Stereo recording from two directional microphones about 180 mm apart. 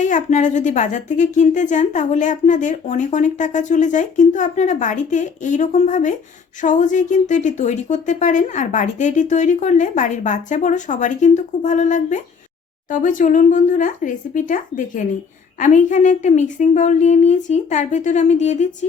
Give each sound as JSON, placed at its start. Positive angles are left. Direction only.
{"t": 0.0, "sound": "a woman's voice", "side_deg": 45}